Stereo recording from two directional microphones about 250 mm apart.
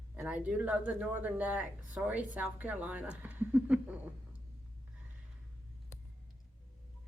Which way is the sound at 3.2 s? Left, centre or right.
Centre.